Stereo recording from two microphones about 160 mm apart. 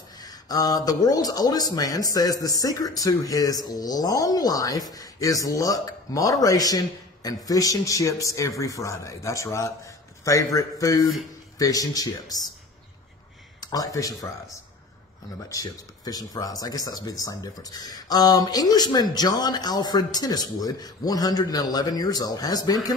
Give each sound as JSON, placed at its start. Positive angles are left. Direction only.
{"t": 0.2, "sound": "speech", "side_deg": 25}
{"t": 13.6, "sound": "speech", "side_deg": 25}
{"t": 15.4, "sound": "speech", "side_deg": 20}